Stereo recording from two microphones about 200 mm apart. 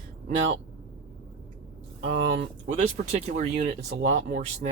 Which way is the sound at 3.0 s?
40° right (ahead or behind).